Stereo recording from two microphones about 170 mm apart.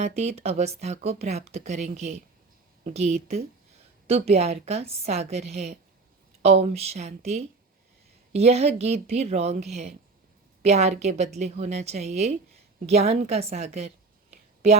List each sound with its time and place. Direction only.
0.0 s a woman's voice: 40° right (ahead or behind)